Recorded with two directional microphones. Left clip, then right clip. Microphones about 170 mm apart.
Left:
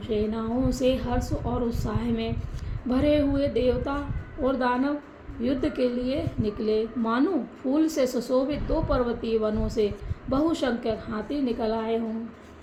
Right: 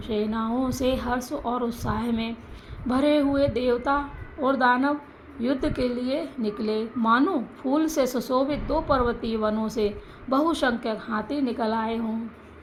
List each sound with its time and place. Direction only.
0.1 s speech: 30° right (ahead or behind)